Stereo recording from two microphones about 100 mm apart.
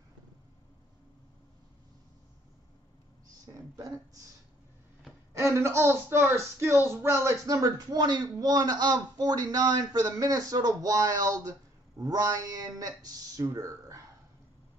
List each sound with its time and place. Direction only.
3.5 s speech: 35° right (ahead or behind)
5.3 s speech: 30° right (ahead or behind)